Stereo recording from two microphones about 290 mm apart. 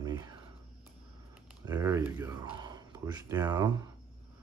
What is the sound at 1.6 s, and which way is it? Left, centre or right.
Speech, centre.